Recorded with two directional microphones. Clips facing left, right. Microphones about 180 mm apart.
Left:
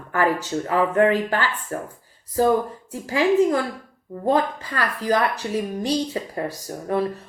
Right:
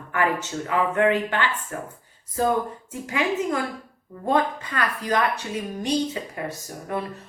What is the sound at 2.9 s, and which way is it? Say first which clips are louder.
Speech: left 6 dB; 35° left (ahead or behind).